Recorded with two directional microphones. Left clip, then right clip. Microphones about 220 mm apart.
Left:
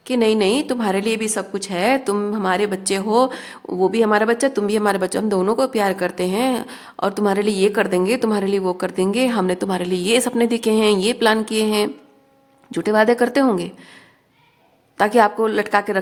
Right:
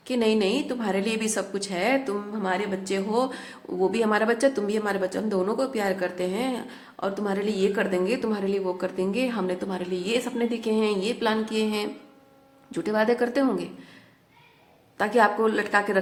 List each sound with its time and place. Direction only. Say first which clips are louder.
0.1 s a woman's voice: left 6 dB; 35° left (ahead or behind)
14.9 s speech: left 6 dB; 40° left (ahead or behind)